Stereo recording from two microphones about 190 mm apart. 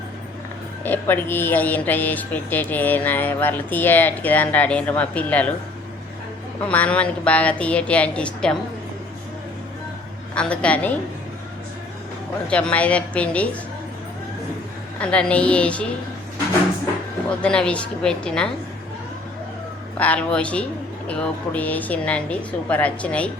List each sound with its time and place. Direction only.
0.9 s speech: 10° left (ahead or behind)
6.7 s speech: 5° left (ahead or behind)
10.3 s speech: 5° left (ahead or behind)
12.5 s speech: 5° left (ahead or behind)
14.9 s speech: 5° left (ahead or behind)
17.4 s a woman's voice: 5° left (ahead or behind)
20.0 s speech: 5° left (ahead or behind)